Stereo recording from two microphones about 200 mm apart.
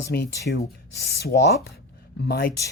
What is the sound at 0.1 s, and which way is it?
Speech, 55° left (ahead or behind).